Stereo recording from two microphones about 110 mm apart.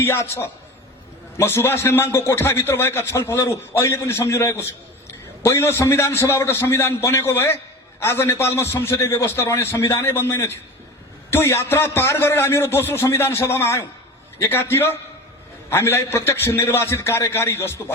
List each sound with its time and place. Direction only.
0.0 s a man's voice: 20° left (ahead or behind)